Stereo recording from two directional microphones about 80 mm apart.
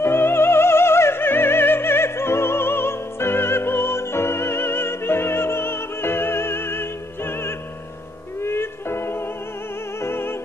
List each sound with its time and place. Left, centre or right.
0.0 s music: left